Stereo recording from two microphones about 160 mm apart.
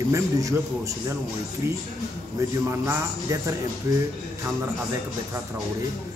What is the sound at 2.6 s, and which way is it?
Speech, 20° right (ahead or behind).